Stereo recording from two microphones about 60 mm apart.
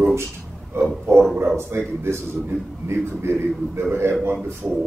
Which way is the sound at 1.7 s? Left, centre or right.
Right.